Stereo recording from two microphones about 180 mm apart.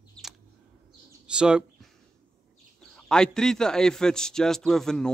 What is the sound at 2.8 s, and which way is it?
Speech, 5° left (ahead or behind).